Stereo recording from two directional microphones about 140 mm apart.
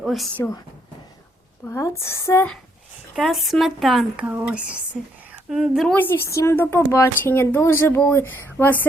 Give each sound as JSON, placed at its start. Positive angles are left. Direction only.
{"t": 0.0, "sound": "a sound", "side_deg": 0}
{"t": 0.3, "sound": "speech", "side_deg": 15}
{"t": 1.6, "sound": "speech", "side_deg": 20}
{"t": 3.2, "sound": "a woman's voice", "side_deg": 0}
{"t": 4.3, "sound": "speech", "side_deg": -10}
{"t": 4.9, "sound": "a woman's voice", "side_deg": 5}
{"t": 5.9, "sound": "speech", "side_deg": 15}